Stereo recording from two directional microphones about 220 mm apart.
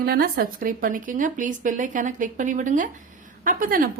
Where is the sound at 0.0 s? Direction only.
45° right (ahead or behind).